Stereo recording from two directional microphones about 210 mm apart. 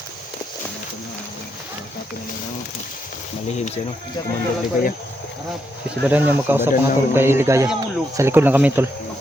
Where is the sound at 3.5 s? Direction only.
30° left (ahead or behind).